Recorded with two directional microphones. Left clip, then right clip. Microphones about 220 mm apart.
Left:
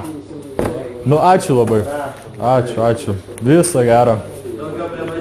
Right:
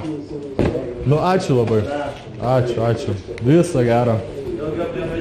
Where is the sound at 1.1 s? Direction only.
45° left (ahead or behind).